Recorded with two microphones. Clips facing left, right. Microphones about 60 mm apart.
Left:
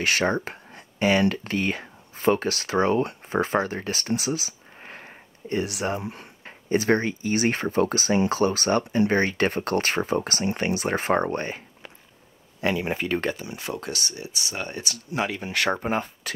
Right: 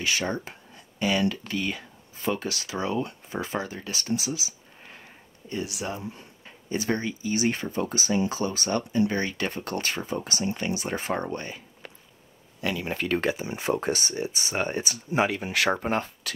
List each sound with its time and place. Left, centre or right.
0.0 s speech: left
12.5 s speech: left
12.9 s speech: centre
13.5 s speech: right
15.2 s speech: centre